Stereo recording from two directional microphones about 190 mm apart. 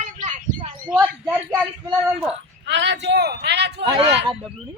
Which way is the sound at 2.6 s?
70° right (ahead or behind).